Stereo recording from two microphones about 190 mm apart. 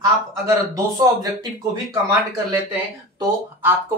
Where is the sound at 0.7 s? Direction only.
20° right (ahead or behind).